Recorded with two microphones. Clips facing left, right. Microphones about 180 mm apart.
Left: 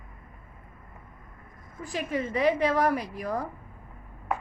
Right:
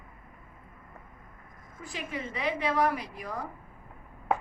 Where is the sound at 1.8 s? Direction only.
45° left (ahead or behind).